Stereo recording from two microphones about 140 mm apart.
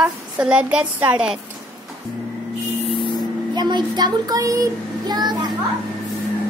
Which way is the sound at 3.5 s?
30° right (ahead or behind).